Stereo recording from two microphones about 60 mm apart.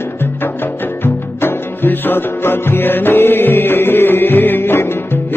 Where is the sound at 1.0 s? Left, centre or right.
Left.